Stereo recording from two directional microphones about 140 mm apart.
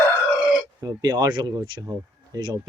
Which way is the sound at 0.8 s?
25° right (ahead or behind).